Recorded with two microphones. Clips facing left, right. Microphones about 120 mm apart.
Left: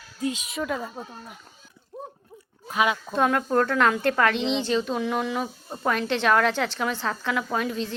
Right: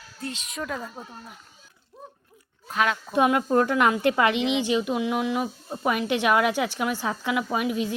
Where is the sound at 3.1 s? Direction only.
15° right (ahead or behind).